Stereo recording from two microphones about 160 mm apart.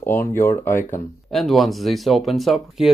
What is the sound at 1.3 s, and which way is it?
Speech, centre (ahead or behind).